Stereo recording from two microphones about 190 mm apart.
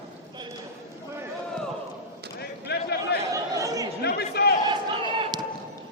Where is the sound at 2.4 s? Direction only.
60° left (ahead or behind).